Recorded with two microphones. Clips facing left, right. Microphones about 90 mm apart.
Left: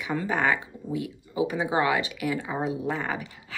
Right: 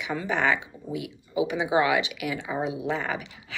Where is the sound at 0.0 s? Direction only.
40° left (ahead or behind).